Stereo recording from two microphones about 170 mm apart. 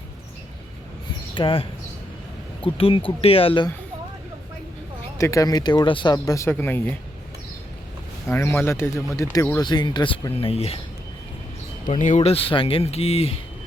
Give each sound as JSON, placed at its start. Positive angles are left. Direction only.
{"t": 1.4, "sound": "speech", "side_deg": 30}
{"t": 5.1, "sound": "speech", "side_deg": 20}
{"t": 8.3, "sound": "speech", "side_deg": 15}
{"t": 11.9, "sound": "speech", "side_deg": 45}